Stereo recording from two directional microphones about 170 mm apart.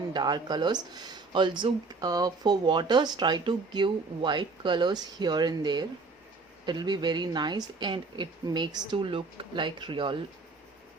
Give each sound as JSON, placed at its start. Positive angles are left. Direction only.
{"t": 0.1, "sound": "speech", "side_deg": -25}